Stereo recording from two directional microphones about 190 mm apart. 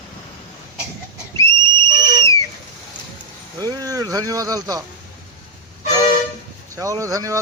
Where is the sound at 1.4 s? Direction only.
15° left (ahead or behind).